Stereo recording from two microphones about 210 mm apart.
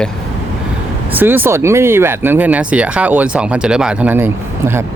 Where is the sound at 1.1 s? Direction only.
10° right (ahead or behind).